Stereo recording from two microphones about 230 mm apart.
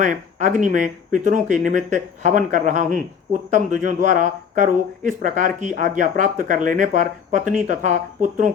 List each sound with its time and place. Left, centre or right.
0.0 s speech: right